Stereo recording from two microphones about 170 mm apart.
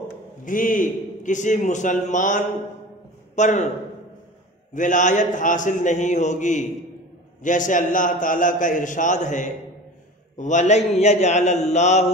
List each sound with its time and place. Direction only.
0.5 s a man's voice: 50° left (ahead or behind)
4.7 s a man's voice: 50° left (ahead or behind)